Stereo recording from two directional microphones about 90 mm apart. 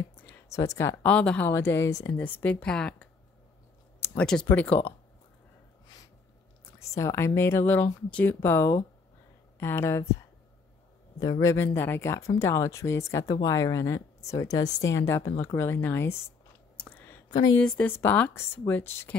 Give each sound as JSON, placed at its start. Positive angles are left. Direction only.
{"t": 0.1, "sound": "a sound", "side_deg": 20}
{"t": 0.5, "sound": "a woman's voice", "side_deg": 35}
{"t": 1.0, "sound": "speech", "side_deg": 15}
{"t": 1.5, "sound": "speech", "side_deg": 30}
{"t": 4.2, "sound": "speech", "side_deg": 10}
{"t": 4.5, "sound": "speech", "side_deg": 20}
{"t": 6.8, "sound": "speech", "side_deg": 35}
{"t": 11.1, "sound": "a man's voice", "side_deg": 55}
{"t": 11.4, "sound": "a woman's voice", "side_deg": 25}
{"t": 16.7, "sound": "a sound", "side_deg": 15}
{"t": 17.6, "sound": "speech", "side_deg": 10}